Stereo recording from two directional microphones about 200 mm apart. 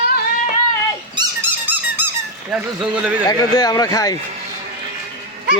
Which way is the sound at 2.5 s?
5° right (ahead or behind).